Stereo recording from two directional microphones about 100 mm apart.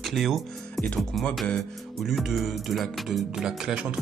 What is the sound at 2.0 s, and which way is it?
Speech, centre (ahead or behind).